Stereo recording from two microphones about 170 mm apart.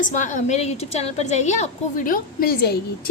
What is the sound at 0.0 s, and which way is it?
A woman's voice, 50° left (ahead or behind).